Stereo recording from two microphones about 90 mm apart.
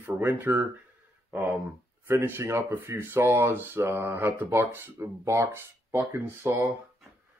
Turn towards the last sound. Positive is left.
turn(degrees=-25)  # may be behind; listen again after turning